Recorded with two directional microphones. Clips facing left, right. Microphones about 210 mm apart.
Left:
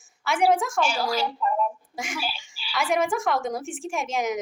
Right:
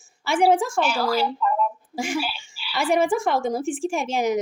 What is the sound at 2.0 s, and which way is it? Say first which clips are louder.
A woman's voice: right 7 dB; 30° right (ahead or behind).